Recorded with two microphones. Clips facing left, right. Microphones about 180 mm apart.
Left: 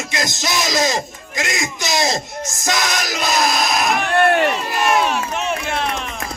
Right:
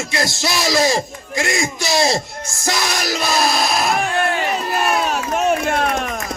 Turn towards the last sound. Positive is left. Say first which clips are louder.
# right 4 dB
turn(degrees=-50)  # may be behind; listen again after turning